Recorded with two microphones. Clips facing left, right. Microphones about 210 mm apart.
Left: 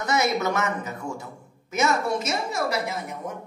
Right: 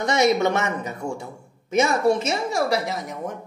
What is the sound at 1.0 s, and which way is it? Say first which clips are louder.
Speech: right 5 dB; 40° right (ahead or behind).